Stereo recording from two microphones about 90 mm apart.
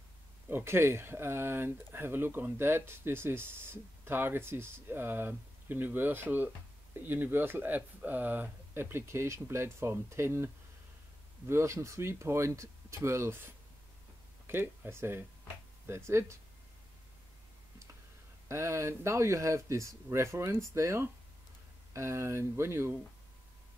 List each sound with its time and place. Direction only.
0.5 s speech: 25° right (ahead or behind)
14.5 s speech: 25° right (ahead or behind)
18.5 s speech: 30° right (ahead or behind)